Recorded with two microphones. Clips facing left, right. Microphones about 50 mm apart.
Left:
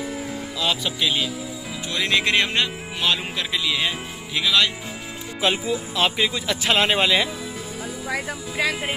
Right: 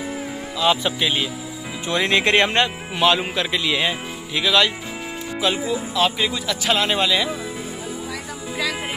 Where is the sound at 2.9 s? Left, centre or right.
Centre.